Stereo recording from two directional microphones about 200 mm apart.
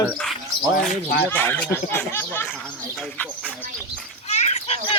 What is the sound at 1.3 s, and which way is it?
Speech, 10° left (ahead or behind).